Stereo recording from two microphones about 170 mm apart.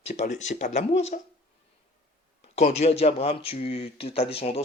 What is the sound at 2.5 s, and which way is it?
Speech, 40° left (ahead or behind).